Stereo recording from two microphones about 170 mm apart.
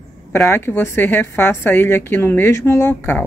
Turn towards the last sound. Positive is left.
turn(degrees=10)  # may be behind; listen again after turning